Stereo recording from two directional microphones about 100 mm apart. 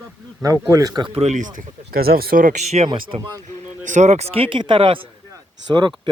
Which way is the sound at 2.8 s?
55° right (ahead or behind).